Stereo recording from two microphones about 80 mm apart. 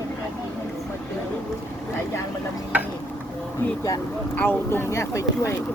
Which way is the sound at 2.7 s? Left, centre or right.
Centre.